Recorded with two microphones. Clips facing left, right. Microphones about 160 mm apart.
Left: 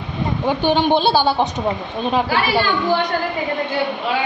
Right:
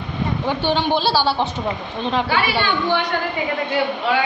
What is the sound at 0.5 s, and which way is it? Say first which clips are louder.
A woman's voice: left 4 dB; 15° left (ahead or behind).